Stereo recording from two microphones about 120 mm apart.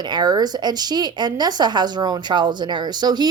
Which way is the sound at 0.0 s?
35° right (ahead or behind).